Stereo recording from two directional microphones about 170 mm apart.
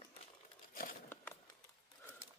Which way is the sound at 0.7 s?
55° left (ahead or behind).